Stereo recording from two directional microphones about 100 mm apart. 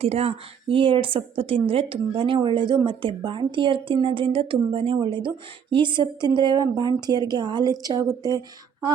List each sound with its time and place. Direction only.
0.0 s a woman's voice: 90° right; by 4.9 s 65° right (ahead or behind)
4.9 s a woman's voice: 55° right (ahead or behind); by 8.9 s 40° right (ahead or behind)